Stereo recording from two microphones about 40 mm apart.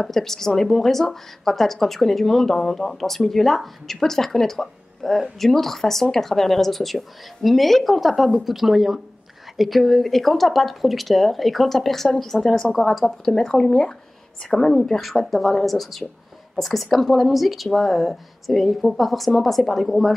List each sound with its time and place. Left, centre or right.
0.0 s a woman's voice: centre
13.2 s a woman's voice: centre
15.0 s a woman's voice: centre